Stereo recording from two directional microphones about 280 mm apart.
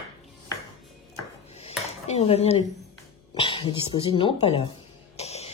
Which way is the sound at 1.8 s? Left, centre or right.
Left.